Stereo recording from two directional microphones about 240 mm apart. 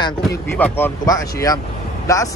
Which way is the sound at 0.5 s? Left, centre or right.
Centre.